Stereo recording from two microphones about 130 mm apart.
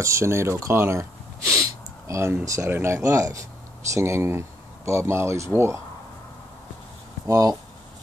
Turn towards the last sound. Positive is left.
turn(degrees=-25)  # may be behind; listen again after turning